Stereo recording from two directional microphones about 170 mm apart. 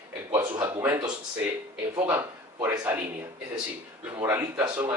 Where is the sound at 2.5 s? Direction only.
20° right (ahead or behind).